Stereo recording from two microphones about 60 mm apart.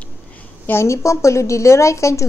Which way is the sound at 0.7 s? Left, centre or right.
Left.